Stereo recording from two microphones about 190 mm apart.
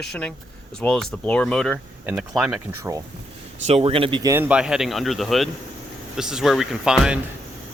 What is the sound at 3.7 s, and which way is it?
Speech, 30° right (ahead or behind).